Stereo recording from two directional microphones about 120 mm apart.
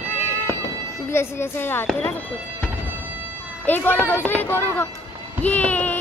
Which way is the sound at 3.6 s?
15° left (ahead or behind).